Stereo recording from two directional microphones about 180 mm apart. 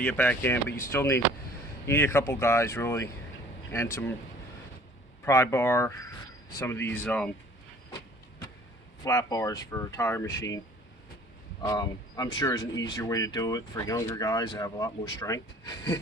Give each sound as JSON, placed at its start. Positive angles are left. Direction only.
{"t": 0.0, "sound": "speech", "side_deg": 10}
{"t": 5.2, "sound": "speech", "side_deg": 15}
{"t": 9.0, "sound": "speech", "side_deg": 20}
{"t": 11.6, "sound": "speech", "side_deg": 20}